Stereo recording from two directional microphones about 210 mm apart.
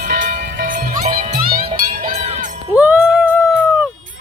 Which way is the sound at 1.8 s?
40° right (ahead or behind).